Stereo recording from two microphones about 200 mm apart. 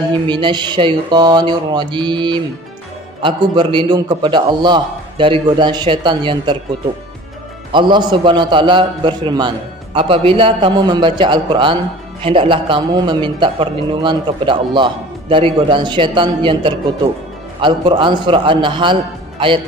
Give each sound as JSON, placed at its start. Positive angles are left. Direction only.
{"t": 0.1, "sound": "a man's voice", "side_deg": -25}
{"t": 7.7, "sound": "a man's voice", "side_deg": -20}